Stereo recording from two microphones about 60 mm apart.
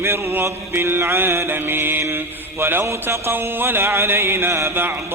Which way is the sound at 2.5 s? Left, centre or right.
Right.